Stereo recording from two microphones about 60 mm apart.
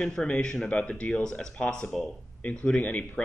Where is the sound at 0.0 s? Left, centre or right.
Centre.